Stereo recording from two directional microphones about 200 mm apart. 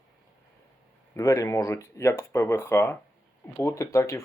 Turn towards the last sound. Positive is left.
turn(degrees=15)  # may be behind; listen again after turning